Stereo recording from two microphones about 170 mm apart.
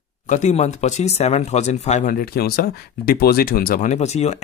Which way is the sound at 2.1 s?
60° left (ahead or behind).